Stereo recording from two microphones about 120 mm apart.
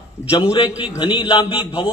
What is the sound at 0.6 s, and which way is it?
Speech, 10° right (ahead or behind).